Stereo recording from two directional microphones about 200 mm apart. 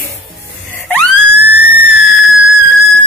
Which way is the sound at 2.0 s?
Centre (ahead or behind).